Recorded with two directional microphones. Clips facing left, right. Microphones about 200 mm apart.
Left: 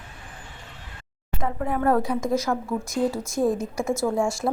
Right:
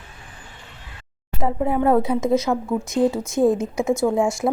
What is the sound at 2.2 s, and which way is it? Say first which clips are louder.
Speech: right 5 dB; centre (ahead or behind).